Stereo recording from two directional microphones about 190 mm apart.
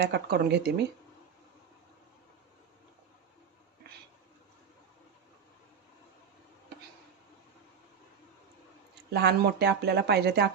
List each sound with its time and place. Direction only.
0.0 s speech: 60° right (ahead or behind)
9.0 s speech: 60° right (ahead or behind)